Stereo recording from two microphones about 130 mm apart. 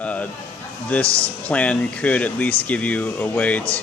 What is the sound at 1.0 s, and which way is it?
Speech, 45° left (ahead or behind).